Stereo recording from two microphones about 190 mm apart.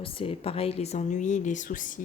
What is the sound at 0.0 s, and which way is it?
Speech, 30° left (ahead or behind).